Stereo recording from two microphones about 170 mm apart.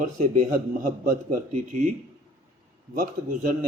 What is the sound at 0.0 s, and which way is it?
Speech, 50° right (ahead or behind).